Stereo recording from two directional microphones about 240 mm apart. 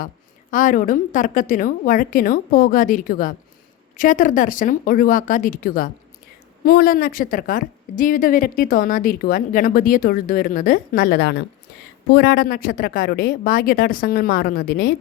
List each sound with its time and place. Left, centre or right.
0.5 s a woman's voice: left